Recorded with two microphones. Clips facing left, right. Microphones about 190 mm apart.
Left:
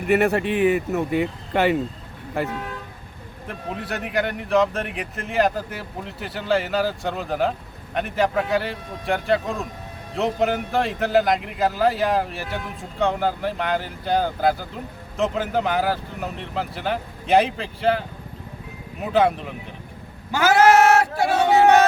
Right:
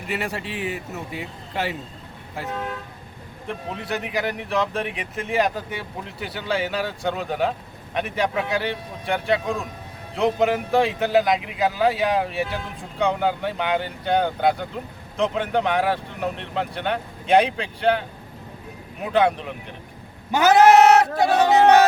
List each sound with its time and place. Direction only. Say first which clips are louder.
0.1 s speech: left 10 dB; 60° left (ahead or behind)
3.4 s a man's voice: even; centre (ahead or behind)
19.1 s a man's voice: even; centre (ahead or behind)
20.3 s speech: right 2 dB; 20° right (ahead or behind)